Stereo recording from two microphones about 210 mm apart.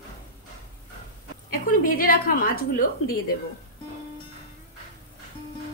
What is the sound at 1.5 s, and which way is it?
A woman's voice, 40° left (ahead or behind).